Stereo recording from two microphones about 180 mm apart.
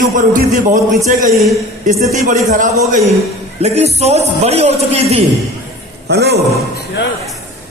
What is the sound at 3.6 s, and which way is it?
A man's voice, 35° right (ahead or behind).